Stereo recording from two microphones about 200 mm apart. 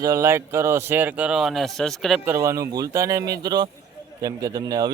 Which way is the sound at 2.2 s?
15° right (ahead or behind).